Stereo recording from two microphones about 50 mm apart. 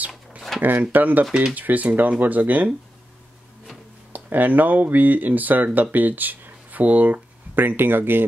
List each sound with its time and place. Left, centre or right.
0.6 s speech: right
4.1 s speech: right